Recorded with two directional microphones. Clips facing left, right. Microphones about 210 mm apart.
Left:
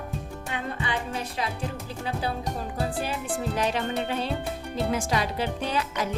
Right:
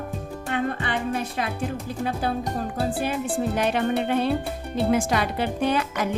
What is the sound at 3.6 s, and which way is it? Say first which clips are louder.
Speech: right 4 dB; 55° right (ahead or behind).